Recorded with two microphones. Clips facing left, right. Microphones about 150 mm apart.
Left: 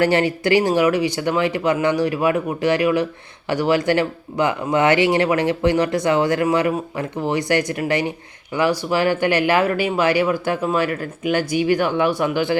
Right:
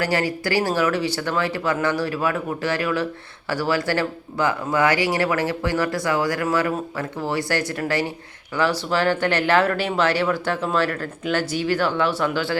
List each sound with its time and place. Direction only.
0.0 s speech: 25° left (ahead or behind)